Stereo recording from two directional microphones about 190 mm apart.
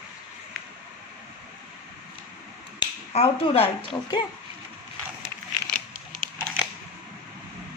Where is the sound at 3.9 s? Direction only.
15° left (ahead or behind).